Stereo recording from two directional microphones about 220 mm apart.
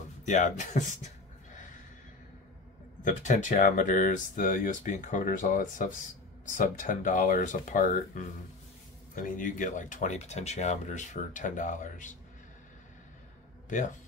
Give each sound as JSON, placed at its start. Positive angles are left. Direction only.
{"t": 0.2, "sound": "speech", "side_deg": 35}
{"t": 3.0, "sound": "speech", "side_deg": 35}
{"t": 13.7, "sound": "a man's voice", "side_deg": 35}